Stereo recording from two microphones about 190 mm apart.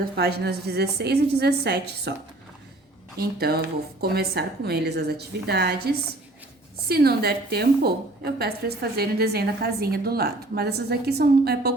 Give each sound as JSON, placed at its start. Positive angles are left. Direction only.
{"t": 0.0, "sound": "a woman's voice", "side_deg": -55}
{"t": 3.2, "sound": "a woman's voice", "side_deg": -55}